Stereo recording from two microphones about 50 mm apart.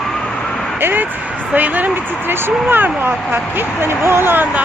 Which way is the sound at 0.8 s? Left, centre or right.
Right.